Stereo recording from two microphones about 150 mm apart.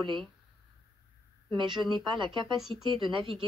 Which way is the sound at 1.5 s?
30° right (ahead or behind).